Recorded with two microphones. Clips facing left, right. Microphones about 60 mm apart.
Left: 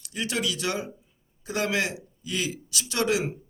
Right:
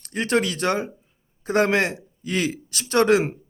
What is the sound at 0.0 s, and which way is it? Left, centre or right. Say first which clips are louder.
A man's voice: right 7 dB; right.